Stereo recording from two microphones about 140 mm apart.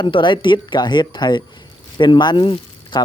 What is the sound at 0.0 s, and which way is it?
Speech, 35° left (ahead or behind).